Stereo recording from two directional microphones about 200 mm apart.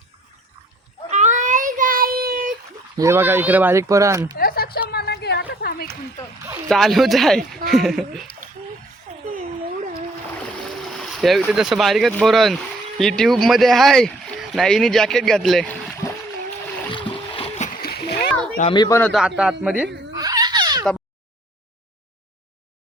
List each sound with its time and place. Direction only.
1.1 s child singing: 35° right (ahead or behind)
3.0 s speech: 10° right (ahead or behind)
4.4 s a sound: 50° left (ahead or behind)
6.7 s speech: centre (ahead or behind)
10.8 s speech: centre (ahead or behind)
16.9 s boat: 25° left (ahead or behind)
17.8 s splash: 55° left (ahead or behind)
18.7 s a man's voice: 20° left (ahead or behind)
18.9 s a man's voice: 5° left (ahead or behind)
19.6 s speech: 5° right (ahead or behind)
20.1 s a sound: 20° right (ahead or behind)